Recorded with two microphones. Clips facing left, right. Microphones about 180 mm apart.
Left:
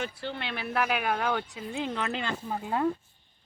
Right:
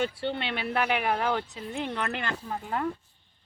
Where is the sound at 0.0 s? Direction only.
25° right (ahead or behind).